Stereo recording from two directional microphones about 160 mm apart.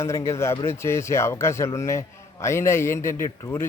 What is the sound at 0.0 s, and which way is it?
A man's voice, 15° left (ahead or behind).